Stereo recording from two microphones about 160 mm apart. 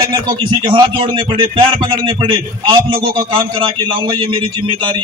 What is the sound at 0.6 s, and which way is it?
A man's voice, 30° right (ahead or behind).